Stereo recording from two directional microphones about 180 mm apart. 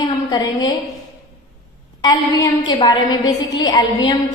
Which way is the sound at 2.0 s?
20° left (ahead or behind).